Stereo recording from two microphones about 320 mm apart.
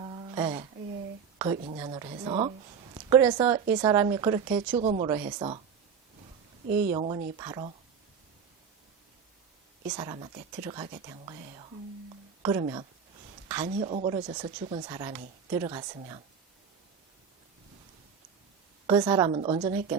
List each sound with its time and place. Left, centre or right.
0.0 s a sound: centre
1.4 s a woman's voice: centre
6.7 s speech: right
6.9 s a woman's voice: centre
9.9 s a woman's voice: centre
18.9 s a woman's voice: centre